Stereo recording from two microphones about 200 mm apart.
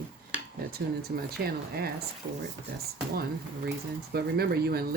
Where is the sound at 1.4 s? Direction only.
55° right (ahead or behind).